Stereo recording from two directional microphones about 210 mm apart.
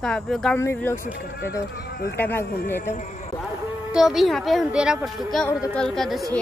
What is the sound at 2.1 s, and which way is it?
Speech, 10° left (ahead or behind).